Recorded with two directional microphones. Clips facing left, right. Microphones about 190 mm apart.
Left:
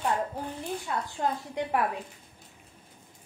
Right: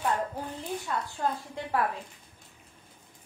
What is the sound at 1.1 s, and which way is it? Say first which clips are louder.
Speech: left 1 dB; 20° left (ahead or behind).